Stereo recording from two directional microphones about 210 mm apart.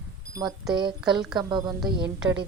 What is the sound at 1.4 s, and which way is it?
Speech, 20° right (ahead or behind).